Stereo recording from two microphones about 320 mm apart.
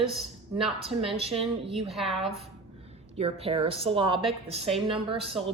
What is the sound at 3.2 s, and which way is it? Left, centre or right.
Speech, centre.